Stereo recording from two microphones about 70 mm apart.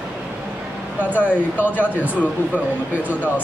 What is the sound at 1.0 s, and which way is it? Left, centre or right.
Speech, left.